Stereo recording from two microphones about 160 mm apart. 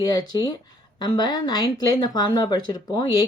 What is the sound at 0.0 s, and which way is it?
Speech, 25° left (ahead or behind).